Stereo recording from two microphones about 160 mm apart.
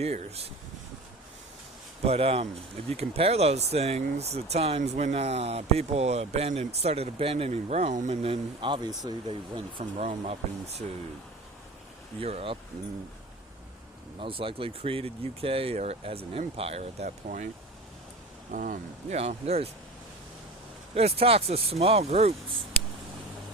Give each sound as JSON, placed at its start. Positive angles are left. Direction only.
{"t": 0.0, "sound": "speech", "side_deg": -40}
{"t": 2.0, "sound": "speech", "side_deg": -40}
{"t": 12.2, "sound": "speech", "side_deg": -35}
{"t": 14.2, "sound": "speech", "side_deg": -35}
{"t": 18.5, "sound": "speech", "side_deg": -55}
{"t": 19.1, "sound": "speech", "side_deg": -40}
{"t": 20.9, "sound": "speech", "side_deg": -40}